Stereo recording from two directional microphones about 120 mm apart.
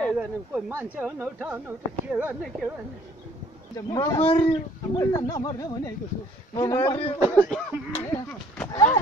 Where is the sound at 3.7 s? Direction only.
30° left (ahead or behind).